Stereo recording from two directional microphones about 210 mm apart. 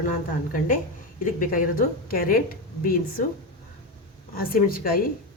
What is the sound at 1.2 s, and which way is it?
A woman's voice, 40° left (ahead or behind).